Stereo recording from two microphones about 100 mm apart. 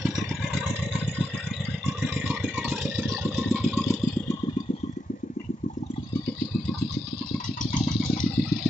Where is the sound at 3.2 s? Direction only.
15° right (ahead or behind).